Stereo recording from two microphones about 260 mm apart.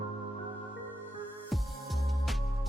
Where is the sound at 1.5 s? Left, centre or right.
Centre.